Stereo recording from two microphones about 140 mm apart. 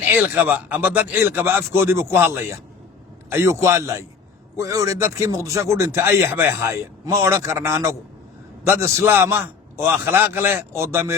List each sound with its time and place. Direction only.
0.0 s speech: 15° right (ahead or behind)